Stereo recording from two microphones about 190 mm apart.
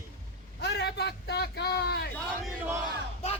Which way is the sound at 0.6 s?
60° left (ahead or behind).